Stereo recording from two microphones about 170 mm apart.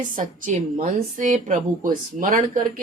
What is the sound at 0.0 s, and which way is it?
A woman's voice, 50° right (ahead or behind).